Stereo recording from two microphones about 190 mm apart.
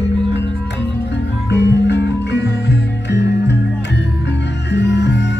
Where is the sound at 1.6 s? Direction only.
65° left (ahead or behind).